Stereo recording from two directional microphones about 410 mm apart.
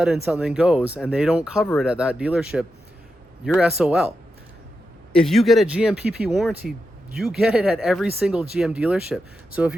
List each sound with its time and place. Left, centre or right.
0.0 s speech: centre
5.1 s speech: centre